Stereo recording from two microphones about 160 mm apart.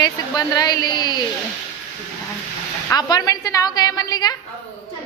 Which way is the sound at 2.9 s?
25° left (ahead or behind).